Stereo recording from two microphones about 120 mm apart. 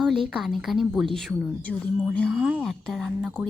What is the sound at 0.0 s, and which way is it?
A woman's voice, centre (ahead or behind).